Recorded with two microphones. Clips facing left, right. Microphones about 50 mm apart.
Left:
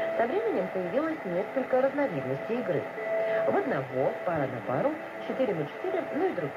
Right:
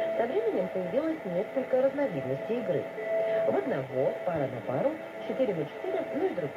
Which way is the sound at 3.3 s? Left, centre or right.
Left.